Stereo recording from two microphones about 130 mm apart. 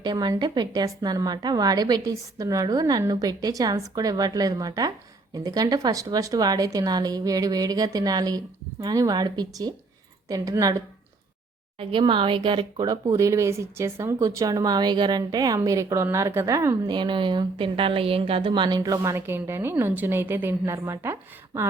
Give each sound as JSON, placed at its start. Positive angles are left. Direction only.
{"t": 0.0, "sound": "a woman's voice", "side_deg": -35}
{"t": 11.8, "sound": "a woman's voice", "side_deg": -40}
{"t": 13.1, "sound": "a woman's voice", "side_deg": -25}
{"t": 16.9, "sound": "a woman's voice", "side_deg": -35}
{"t": 18.8, "sound": "a woman's voice", "side_deg": -25}